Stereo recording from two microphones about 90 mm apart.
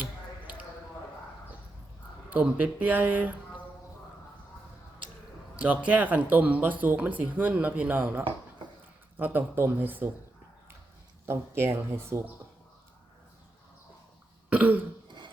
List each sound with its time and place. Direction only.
2.3 s speech: 15° right (ahead or behind)
5.5 s speech: 15° right (ahead or behind)
11.3 s speech: 30° right (ahead or behind)
14.5 s speech: 15° right (ahead or behind)